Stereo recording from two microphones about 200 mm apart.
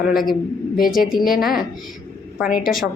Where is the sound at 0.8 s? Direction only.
45° left (ahead or behind).